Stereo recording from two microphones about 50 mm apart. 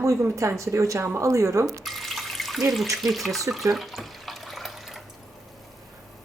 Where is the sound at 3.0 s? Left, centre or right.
Centre.